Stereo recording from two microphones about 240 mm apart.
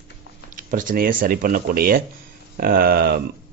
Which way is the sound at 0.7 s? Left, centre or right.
Right.